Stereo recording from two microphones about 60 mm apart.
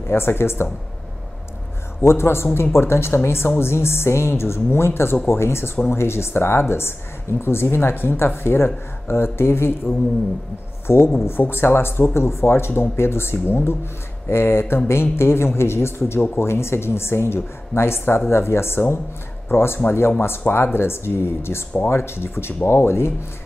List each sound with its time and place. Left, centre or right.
0.1 s speech: left
2.0 s speech: left
10.9 s speech: left